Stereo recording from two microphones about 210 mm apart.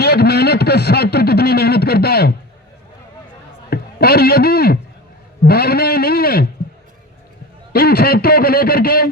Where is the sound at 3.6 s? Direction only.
50° left (ahead or behind).